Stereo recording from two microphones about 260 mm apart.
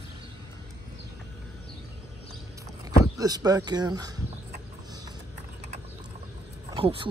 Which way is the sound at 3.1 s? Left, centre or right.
Centre.